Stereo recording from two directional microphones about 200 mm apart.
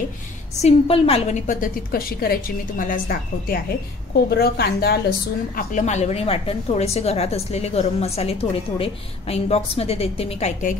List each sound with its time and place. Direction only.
0.6 s a woman's voice: 30° left (ahead or behind); by 4.9 s 50° left (ahead or behind)
5.6 s a woman's voice: 35° left (ahead or behind)